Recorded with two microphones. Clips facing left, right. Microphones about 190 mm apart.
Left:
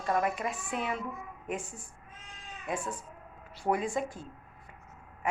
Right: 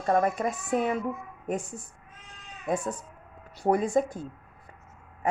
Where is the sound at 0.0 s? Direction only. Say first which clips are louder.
Right 5 dB; 40° right (ahead or behind).